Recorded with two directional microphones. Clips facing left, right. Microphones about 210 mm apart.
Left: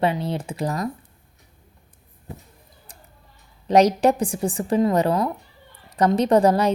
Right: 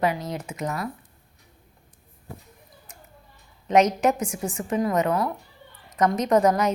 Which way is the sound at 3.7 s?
35° left (ahead or behind).